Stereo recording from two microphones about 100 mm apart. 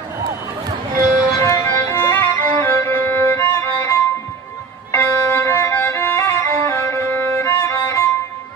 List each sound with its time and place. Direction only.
1.4 s music: 30° left (ahead or behind)